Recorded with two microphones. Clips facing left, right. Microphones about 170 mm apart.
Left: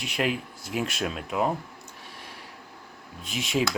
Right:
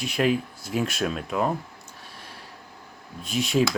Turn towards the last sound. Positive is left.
turn(degrees=20)  # may be behind; listen again after turning